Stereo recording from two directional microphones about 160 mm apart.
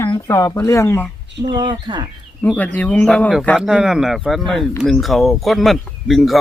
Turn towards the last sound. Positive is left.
turn(degrees=0)  # may be behind; listen again after turning